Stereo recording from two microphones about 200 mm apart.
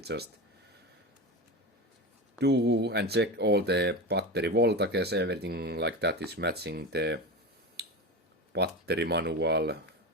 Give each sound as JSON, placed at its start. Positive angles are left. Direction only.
{"t": 0.0, "sound": "speech", "side_deg": -55}
{"t": 2.4, "sound": "speech", "side_deg": -55}
{"t": 8.5, "sound": "speech", "side_deg": -55}